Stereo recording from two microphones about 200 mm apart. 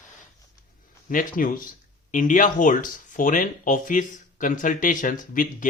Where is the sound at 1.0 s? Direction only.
45° left (ahead or behind).